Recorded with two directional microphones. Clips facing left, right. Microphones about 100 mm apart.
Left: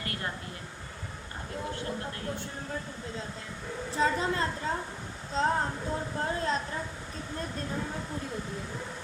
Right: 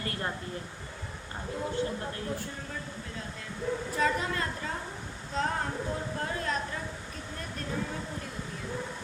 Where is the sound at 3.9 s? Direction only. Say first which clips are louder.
Left 3 dB; 30° left (ahead or behind).